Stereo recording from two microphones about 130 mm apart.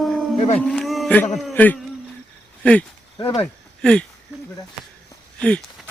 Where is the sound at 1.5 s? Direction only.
15° left (ahead or behind).